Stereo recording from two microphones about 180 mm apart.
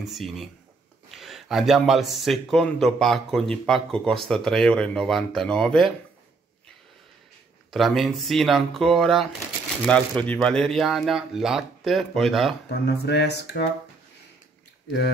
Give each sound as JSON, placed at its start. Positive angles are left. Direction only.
{"t": 0.0, "sound": "a man's voice", "side_deg": 0}
{"t": 7.7, "sound": "a man's voice", "side_deg": 0}
{"t": 12.6, "sound": "speech", "side_deg": 65}
{"t": 14.9, "sound": "speech", "side_deg": 65}